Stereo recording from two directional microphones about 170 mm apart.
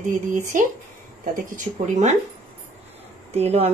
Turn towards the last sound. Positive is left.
turn(degrees=-35)  # may be behind; listen again after turning